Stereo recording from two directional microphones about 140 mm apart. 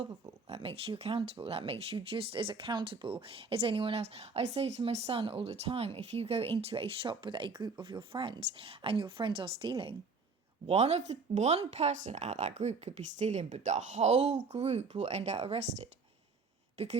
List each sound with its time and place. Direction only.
0.4 s speech: 45° right (ahead or behind)
10.7 s speech: 50° right (ahead or behind)